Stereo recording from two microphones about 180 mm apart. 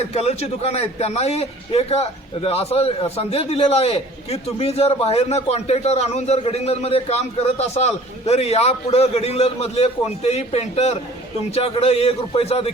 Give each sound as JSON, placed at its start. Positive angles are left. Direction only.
{"t": 0.1, "sound": "a man's voice", "side_deg": 35}